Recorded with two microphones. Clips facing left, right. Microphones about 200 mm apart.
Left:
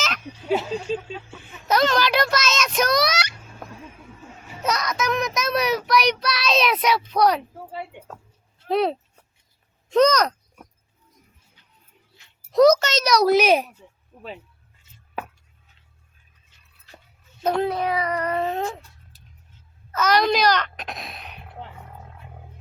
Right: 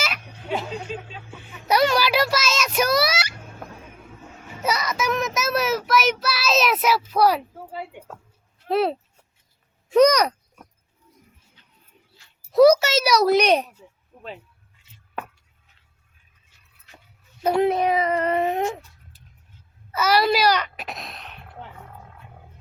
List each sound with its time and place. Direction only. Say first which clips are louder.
0.9 s speech: left 6 dB; 30° left (ahead or behind)
1.6 s a sound: right 1 dB; 10° right (ahead or behind)
4.6 s child singing: even; 5° right (ahead or behind)
8.6 s speech: even; centre (ahead or behind)
12.5 s a child's voice: right 1 dB; 10° right (ahead or behind)
14.1 s a sound: left 2 dB; 5° left (ahead or behind)
17.4 s a child's voice: right 2 dB; 10° right (ahead or behind)
17.7 s speech: right 3 dB; 20° right (ahead or behind)
19.9 s a child's voice: even; 10° right (ahead or behind)